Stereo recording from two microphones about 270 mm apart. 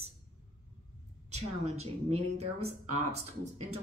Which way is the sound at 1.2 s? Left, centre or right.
Right.